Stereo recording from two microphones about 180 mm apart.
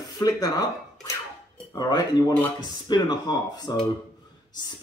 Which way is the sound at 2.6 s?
25° left (ahead or behind).